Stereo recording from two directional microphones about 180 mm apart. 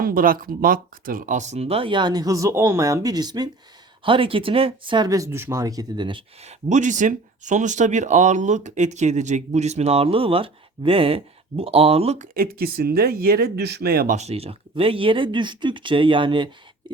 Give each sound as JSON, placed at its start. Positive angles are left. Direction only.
{"t": 0.0, "sound": "speech", "side_deg": -50}
{"t": 6.7, "sound": "speech", "side_deg": -40}
{"t": 12.3, "sound": "speech", "side_deg": -55}
{"t": 14.2, "sound": "speech", "side_deg": -35}